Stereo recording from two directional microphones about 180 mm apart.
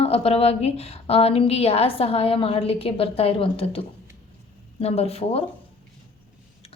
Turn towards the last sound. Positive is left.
turn(degrees=35)  # may be behind; listen again after turning